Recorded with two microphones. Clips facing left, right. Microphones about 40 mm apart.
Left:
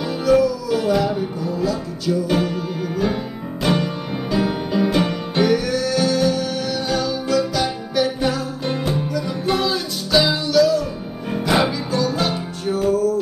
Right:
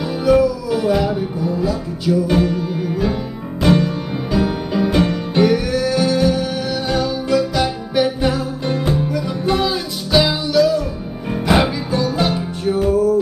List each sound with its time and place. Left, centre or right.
0.0 s music: centre
2.2 s music: centre
5.4 s music: centre